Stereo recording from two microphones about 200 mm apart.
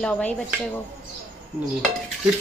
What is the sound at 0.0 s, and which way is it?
Chopping, 5° left (ahead or behind).